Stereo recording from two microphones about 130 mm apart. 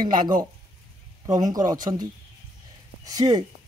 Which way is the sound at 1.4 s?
30° right (ahead or behind).